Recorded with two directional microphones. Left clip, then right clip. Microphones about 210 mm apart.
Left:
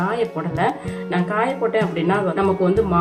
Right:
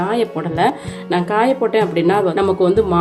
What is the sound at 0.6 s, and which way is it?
Speech, 40° right (ahead or behind).